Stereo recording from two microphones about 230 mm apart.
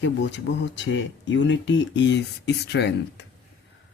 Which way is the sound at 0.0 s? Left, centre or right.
Left.